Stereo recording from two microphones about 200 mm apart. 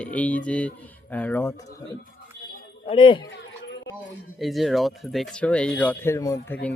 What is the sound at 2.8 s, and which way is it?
Speech, 25° left (ahead or behind).